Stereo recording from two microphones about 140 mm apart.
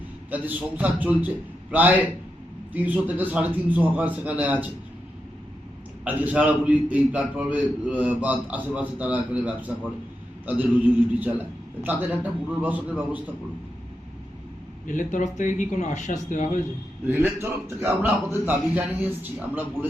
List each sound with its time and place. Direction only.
0.3 s a man's voice: 10° right (ahead or behind)
6.1 s a man's voice: 10° right (ahead or behind)
14.8 s speech: 65° left (ahead or behind)
17.1 s a man's voice: 20° right (ahead or behind)